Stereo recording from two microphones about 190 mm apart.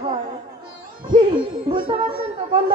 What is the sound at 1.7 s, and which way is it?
Music, 25° right (ahead or behind).